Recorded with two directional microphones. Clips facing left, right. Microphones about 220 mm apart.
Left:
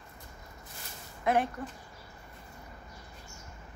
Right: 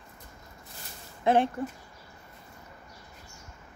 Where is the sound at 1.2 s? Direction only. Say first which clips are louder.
Right 4 dB; 30° right (ahead or behind).